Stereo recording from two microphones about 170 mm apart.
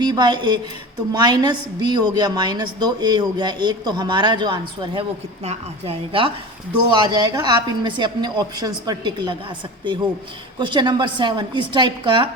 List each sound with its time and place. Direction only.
0.0 s a woman's voice: 25° right (ahead or behind)